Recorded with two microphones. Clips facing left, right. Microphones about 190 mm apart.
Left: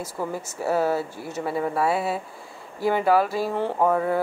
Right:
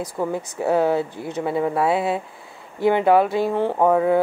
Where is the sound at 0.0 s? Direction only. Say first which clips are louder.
Right 5 dB; 15° right (ahead or behind).